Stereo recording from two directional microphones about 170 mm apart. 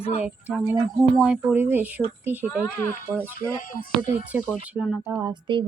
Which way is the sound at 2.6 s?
15° left (ahead or behind).